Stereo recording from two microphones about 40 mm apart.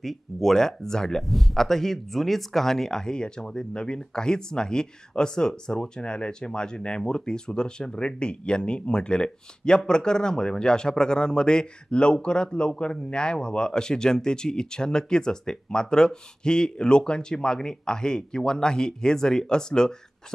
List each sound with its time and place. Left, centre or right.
0.0 s speech: centre
1.2 s speech: centre